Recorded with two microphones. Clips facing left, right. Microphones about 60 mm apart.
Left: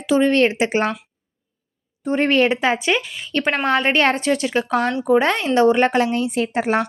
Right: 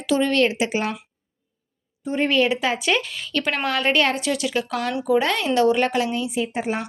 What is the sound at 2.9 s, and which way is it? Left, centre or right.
Speech, centre.